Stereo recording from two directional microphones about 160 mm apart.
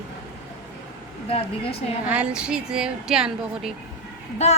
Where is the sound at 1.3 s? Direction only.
35° left (ahead or behind).